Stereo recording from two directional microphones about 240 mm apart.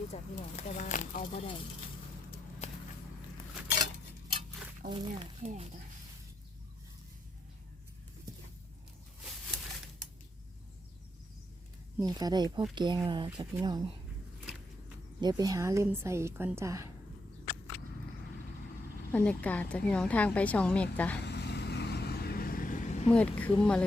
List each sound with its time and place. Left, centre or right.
0.1 s speech: left
2.6 s walk: left
4.9 s speech: centre
11.9 s a woman's voice: centre
15.2 s a woman's voice: centre
19.1 s a woman's voice: centre
21.2 s vehicle: left
23.1 s a woman's voice: centre